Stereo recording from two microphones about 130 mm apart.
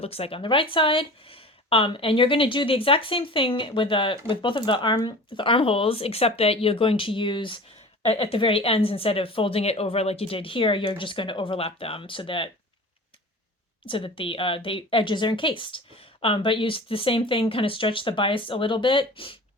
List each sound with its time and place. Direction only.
0.0 s speech: 50° left (ahead or behind)
8.0 s speech: 50° left (ahead or behind)
13.8 s a woman's voice: 40° left (ahead or behind)